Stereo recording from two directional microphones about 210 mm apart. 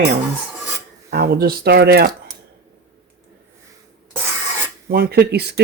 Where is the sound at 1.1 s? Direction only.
45° right (ahead or behind).